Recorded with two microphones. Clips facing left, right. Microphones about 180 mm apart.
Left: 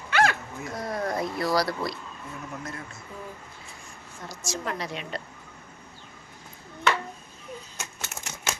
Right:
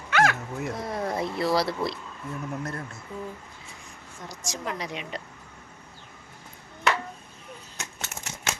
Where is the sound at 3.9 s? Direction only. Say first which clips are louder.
Even; 15° right (ahead or behind).